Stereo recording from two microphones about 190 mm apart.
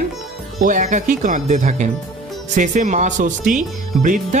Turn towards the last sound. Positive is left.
turn(degrees=-40)  # may be behind; listen again after turning